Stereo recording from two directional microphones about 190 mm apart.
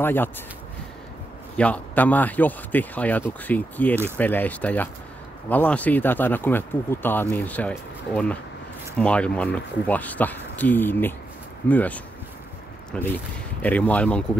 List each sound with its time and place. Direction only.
0.0 s speech: 10° left (ahead or behind)
1.6 s speech: 10° left (ahead or behind)